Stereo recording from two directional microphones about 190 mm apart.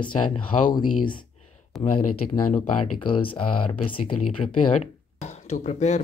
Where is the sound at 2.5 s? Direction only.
30° left (ahead or behind).